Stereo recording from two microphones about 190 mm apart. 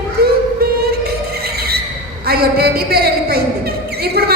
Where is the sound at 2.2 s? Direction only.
55° right (ahead or behind).